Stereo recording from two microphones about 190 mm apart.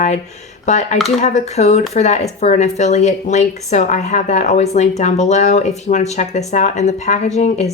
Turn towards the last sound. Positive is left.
turn(degrees=35)  # may be behind; listen again after turning